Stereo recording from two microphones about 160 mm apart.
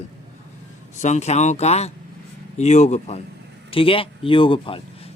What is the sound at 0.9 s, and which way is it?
Speech, 45° left (ahead or behind).